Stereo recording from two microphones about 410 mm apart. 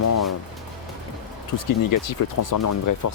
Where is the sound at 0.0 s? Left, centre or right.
Left.